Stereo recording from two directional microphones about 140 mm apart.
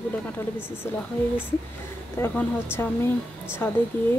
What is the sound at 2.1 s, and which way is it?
A woman's voice, 15° left (ahead or behind).